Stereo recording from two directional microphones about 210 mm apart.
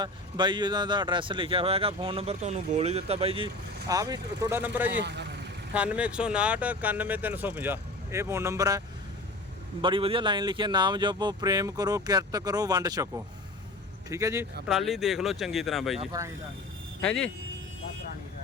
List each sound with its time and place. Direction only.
0.0 s speech: 20° right (ahead or behind)
5.0 s speech: 55° right (ahead or behind)
5.7 s speech: 5° right (ahead or behind)
9.8 s speech: 25° right (ahead or behind)
14.7 s speech: centre (ahead or behind)
17.0 s speech: 5° left (ahead or behind)